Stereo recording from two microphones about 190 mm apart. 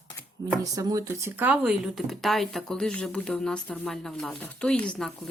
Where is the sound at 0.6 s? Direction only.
20° right (ahead or behind); by 5.2 s centre (ahead or behind).